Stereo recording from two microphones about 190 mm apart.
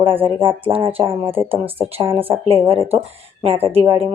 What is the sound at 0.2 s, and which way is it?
A woman's voice, 30° right (ahead or behind).